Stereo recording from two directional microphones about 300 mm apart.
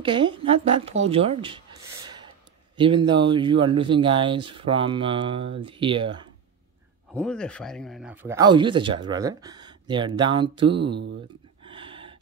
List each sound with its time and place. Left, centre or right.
0.0 s speech: centre
7.2 s speech: centre
10.8 s speech: right
11.6 s a sound: centre